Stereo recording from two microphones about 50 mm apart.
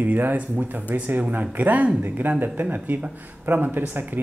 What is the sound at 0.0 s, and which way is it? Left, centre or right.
Speech, right.